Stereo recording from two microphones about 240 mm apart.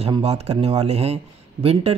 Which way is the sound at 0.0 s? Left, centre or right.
Right.